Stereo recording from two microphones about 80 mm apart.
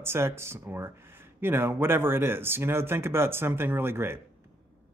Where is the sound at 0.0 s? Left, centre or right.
Right.